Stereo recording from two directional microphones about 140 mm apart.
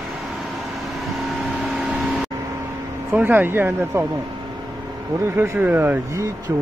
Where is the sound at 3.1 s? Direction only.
15° right (ahead or behind).